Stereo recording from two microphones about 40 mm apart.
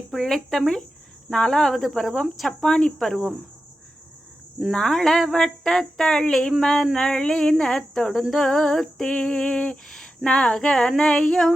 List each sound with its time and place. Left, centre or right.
0.2 s speech: centre
1.7 s cricket: centre
2.5 s speech: centre
4.7 s speech: centre
9.0 s a sound: left
10.2 s speech: left